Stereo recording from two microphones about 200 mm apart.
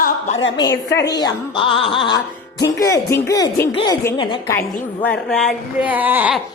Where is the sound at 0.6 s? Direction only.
15° left (ahead or behind).